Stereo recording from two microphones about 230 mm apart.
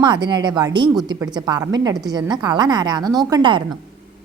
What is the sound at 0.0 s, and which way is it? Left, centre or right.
A woman's voice, centre.